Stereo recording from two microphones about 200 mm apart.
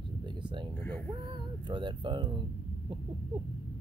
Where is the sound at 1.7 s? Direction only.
25° right (ahead or behind).